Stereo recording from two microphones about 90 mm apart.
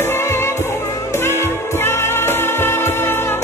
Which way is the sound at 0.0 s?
30° left (ahead or behind).